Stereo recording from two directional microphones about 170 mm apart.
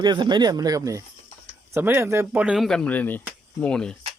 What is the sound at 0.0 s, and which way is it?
Speech, 25° right (ahead or behind).